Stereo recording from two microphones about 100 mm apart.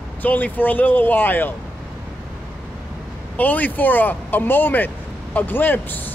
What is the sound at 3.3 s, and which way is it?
Speech, 15° left (ahead or behind).